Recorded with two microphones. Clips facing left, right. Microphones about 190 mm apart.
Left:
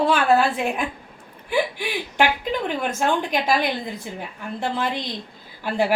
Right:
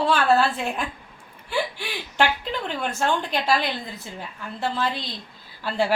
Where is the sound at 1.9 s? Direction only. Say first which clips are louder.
Left 1 dB; 15° left (ahead or behind).